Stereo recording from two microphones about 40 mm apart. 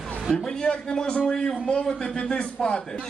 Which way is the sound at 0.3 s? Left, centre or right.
Centre.